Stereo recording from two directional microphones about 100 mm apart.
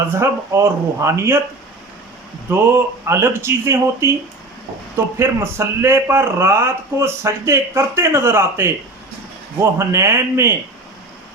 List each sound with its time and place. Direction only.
0.1 s a man's voice: 25° right (ahead or behind)
2.5 s a man's voice: 25° right (ahead or behind)